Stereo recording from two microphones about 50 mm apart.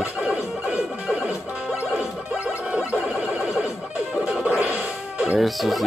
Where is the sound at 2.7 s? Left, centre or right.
Right.